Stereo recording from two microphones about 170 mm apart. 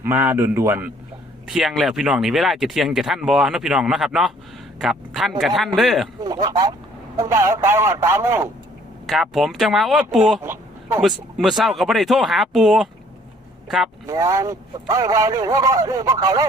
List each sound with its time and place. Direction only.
0.0 s speech: 10° right (ahead or behind)
6.2 s speech: 25° right (ahead or behind)
9.0 s speech: centre (ahead or behind)
10.4 s a sound: 15° right (ahead or behind)
11.3 s speech: centre (ahead or behind)
14.1 s speech: 20° right (ahead or behind)